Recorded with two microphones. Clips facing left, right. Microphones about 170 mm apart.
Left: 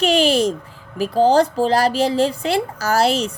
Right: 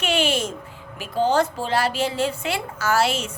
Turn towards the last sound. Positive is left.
turn(degrees=40)  # may be behind; listen again after turning